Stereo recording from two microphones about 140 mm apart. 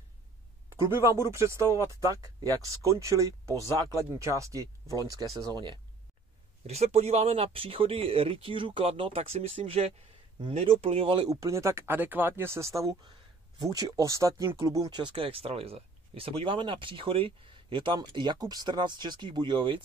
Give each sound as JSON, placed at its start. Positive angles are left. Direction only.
{"t": 0.7, "sound": "speech", "side_deg": -20}
{"t": 6.6, "sound": "speech", "side_deg": -50}
{"t": 11.2, "sound": "speech", "side_deg": -25}